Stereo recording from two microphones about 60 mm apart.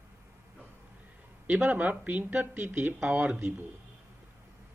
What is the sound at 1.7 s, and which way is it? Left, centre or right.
Speech, right.